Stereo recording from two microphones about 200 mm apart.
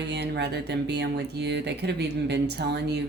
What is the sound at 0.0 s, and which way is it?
Speech, 60° right (ahead or behind).